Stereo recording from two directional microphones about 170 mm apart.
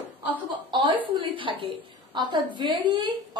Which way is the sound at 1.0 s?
30° right (ahead or behind).